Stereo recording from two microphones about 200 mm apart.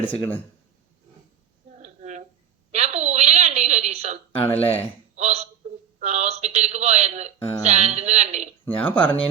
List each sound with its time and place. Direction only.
0.0 s speech: 10° left (ahead or behind)
1.8 s a sound: 35° right (ahead or behind)
4.5 s speech: 30° left (ahead or behind)
5.1 s a man's voice: 35° right (ahead or behind)
8.6 s speech: 10° left (ahead or behind)